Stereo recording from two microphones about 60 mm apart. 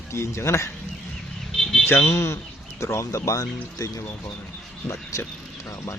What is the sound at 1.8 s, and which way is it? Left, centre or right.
Speech, left.